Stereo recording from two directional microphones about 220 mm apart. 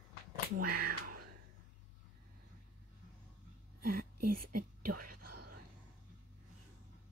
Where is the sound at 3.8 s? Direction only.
40° right (ahead or behind).